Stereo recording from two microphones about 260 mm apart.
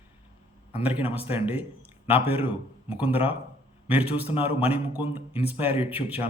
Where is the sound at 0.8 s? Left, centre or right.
Centre.